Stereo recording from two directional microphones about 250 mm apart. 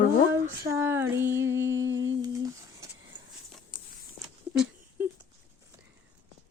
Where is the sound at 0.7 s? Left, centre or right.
Centre.